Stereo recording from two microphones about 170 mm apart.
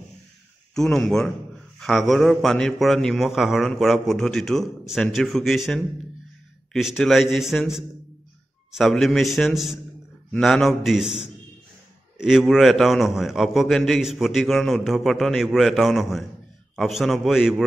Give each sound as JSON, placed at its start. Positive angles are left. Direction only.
{"t": 0.7, "sound": "a man's voice", "side_deg": 5}